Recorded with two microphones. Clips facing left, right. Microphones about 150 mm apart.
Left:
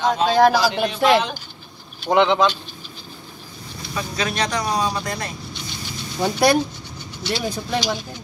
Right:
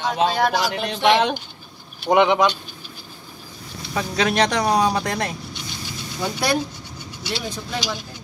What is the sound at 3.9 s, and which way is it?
Speech, 70° right (ahead or behind).